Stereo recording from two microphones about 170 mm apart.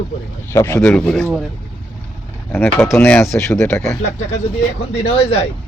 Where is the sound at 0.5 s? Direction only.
15° left (ahead or behind).